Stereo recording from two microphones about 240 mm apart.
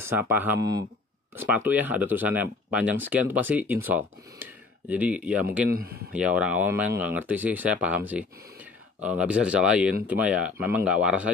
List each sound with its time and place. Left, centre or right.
0.0 s speech: centre
5.8 s speech: right
6.1 s speech: centre